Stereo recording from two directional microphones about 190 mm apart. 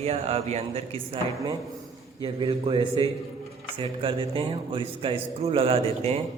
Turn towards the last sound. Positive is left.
turn(degrees=-30)  # may be behind; listen again after turning